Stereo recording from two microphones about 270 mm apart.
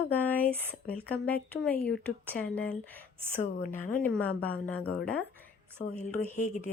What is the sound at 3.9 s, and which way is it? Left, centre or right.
Speech, centre.